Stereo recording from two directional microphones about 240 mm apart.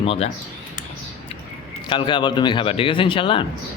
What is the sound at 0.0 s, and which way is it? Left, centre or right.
Speech, left.